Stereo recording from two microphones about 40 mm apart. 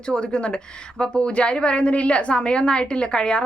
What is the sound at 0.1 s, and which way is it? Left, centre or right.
A woman's voice, left.